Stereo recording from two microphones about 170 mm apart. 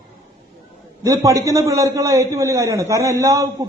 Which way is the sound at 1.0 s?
20° right (ahead or behind).